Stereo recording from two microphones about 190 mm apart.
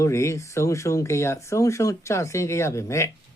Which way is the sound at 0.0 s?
15° left (ahead or behind).